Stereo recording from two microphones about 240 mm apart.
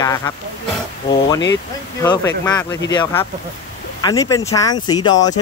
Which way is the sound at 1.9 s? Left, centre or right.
Centre.